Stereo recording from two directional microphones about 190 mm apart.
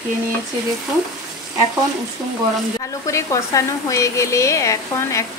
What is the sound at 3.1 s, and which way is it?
Speech, 15° left (ahead or behind).